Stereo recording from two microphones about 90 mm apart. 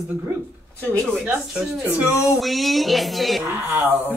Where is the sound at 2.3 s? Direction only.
Centre (ahead or behind).